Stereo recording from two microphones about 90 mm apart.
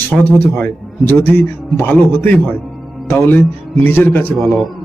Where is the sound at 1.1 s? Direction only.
20° left (ahead or behind).